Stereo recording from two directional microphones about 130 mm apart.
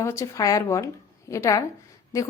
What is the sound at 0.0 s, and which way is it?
A woman's voice, 20° left (ahead or behind).